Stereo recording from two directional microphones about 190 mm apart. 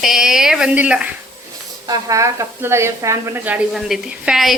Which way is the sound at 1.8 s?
20° right (ahead or behind).